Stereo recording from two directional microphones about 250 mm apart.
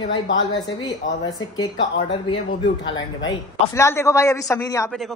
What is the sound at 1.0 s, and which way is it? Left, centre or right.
Speech, left.